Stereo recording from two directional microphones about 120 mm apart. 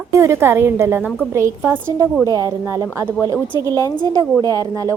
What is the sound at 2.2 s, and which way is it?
A woman's voice, 30° right (ahead or behind).